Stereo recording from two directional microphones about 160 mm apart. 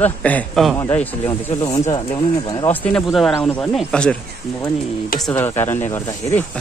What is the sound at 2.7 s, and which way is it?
Speech, 5° left (ahead or behind).